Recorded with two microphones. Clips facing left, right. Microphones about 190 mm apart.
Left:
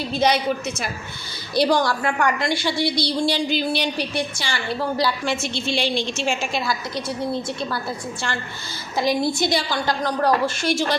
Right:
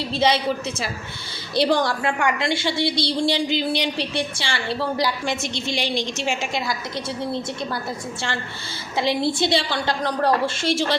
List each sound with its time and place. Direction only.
0.1 s a woman's voice: 25° right (ahead or behind)
5.0 s a woman's voice: 20° right (ahead or behind)
9.0 s a woman's voice: 25° right (ahead or behind)